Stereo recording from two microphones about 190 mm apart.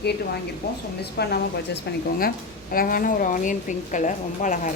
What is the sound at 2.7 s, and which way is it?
A woman's voice, 50° left (ahead or behind).